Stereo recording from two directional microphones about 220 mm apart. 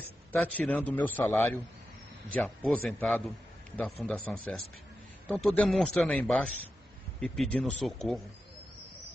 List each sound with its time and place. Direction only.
0.3 s a man's voice: 5° left (ahead or behind)